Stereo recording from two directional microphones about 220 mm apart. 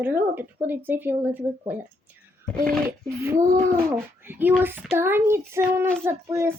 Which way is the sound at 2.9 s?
10° right (ahead or behind).